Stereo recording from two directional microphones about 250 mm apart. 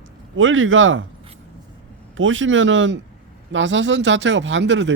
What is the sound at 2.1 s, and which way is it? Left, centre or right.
Speech, right.